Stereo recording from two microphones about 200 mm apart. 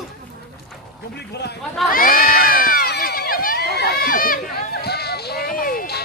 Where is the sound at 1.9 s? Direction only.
45° left (ahead or behind).